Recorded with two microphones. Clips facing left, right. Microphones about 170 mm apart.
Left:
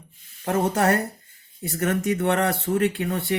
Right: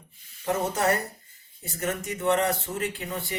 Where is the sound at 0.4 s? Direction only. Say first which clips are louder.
Left 4 dB; 60° left (ahead or behind).